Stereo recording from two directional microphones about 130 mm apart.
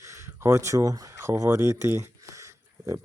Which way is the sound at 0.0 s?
20° right (ahead or behind).